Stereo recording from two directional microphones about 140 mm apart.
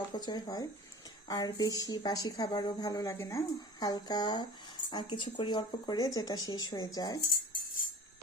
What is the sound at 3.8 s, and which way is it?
Speech, 30° left (ahead or behind).